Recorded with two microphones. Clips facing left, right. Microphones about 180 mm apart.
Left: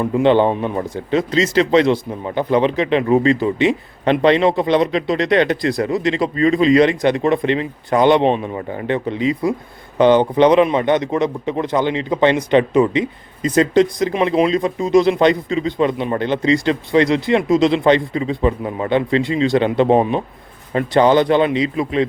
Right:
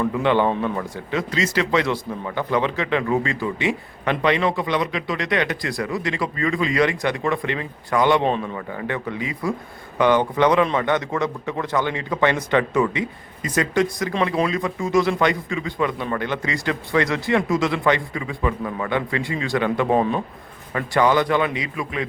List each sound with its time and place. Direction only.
0.0 s a man's voice: 30° left (ahead or behind)